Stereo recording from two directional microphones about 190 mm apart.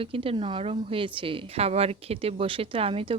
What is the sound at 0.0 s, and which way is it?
Speech, 30° right (ahead or behind).